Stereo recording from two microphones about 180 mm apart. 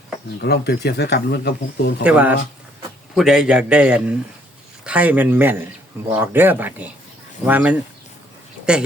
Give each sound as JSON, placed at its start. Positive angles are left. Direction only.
{"t": 0.4, "sound": "speech", "side_deg": 65}
{"t": 2.0, "sound": "a man's voice", "side_deg": -10}